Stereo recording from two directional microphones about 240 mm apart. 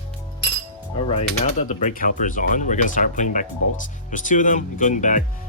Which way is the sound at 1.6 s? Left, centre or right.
Left.